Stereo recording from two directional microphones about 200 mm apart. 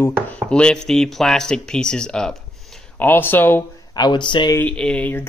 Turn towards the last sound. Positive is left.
turn(degrees=10)  # may be behind; listen again after turning